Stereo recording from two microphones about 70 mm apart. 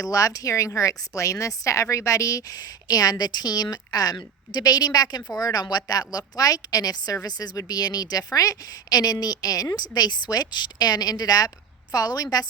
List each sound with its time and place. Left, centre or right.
0.0 s a woman's voice: left